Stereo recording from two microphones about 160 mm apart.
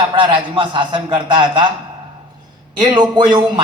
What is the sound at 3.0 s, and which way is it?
Speech, 30° right (ahead or behind).